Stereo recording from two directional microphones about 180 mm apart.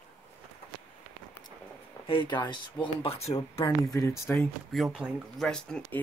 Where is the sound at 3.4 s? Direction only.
25° left (ahead or behind).